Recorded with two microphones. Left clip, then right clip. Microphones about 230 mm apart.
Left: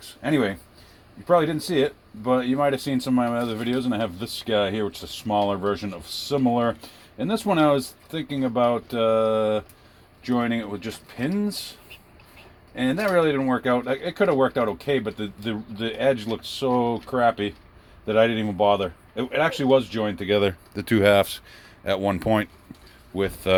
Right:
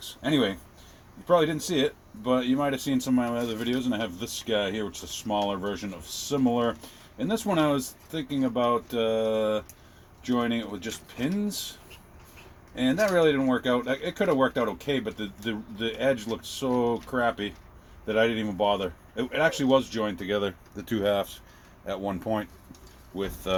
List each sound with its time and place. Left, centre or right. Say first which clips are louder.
0.2 s speech: left 3 dB; left
12.7 s speech: left 2 dB; left